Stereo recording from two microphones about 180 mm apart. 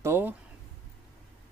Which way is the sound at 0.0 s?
10° right (ahead or behind).